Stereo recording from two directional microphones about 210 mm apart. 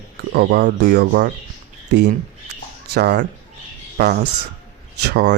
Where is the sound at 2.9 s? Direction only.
50° right (ahead or behind).